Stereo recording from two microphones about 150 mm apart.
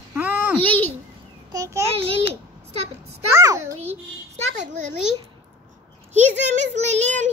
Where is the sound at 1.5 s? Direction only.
20° right (ahead or behind).